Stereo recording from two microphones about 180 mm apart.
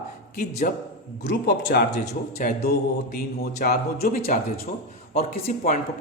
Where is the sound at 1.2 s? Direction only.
75° left (ahead or behind); by 4.2 s 55° left (ahead or behind).